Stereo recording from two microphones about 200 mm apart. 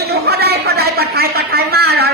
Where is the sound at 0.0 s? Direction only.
50° right (ahead or behind).